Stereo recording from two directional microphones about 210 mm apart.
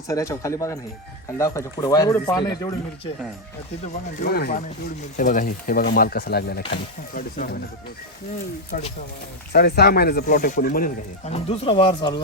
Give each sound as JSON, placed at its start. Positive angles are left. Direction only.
{"t": 0.1, "sound": "speech", "side_deg": 15}
{"t": 4.2, "sound": "speech", "side_deg": 50}
{"t": 8.7, "sound": "speech", "side_deg": 40}
{"t": 9.5, "sound": "speech", "side_deg": 50}